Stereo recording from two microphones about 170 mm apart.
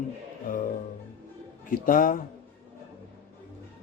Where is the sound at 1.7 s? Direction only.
55° left (ahead or behind).